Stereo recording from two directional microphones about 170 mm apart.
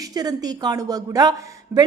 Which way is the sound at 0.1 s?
25° right (ahead or behind).